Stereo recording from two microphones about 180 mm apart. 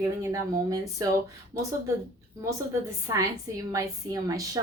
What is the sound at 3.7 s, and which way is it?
Speech, 20° right (ahead or behind).